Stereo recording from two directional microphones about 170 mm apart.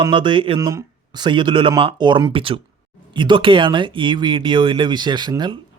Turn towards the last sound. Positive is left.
turn(degrees=-25)  # may be behind; listen again after turning